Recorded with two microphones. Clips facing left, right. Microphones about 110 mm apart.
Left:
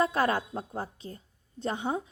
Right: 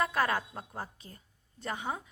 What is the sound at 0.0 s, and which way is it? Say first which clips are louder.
A woman's voice: left 3 dB; 30° left (ahead or behind).